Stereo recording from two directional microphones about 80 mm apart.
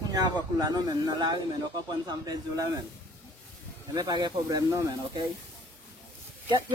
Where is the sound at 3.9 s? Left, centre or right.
Right.